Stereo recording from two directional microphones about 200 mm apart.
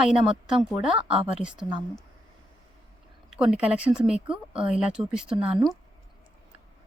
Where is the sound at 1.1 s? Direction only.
30° right (ahead or behind).